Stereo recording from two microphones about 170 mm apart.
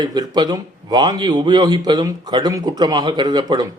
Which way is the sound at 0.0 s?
25° right (ahead or behind).